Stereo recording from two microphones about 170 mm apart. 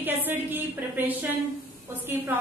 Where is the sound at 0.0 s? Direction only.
10° right (ahead or behind).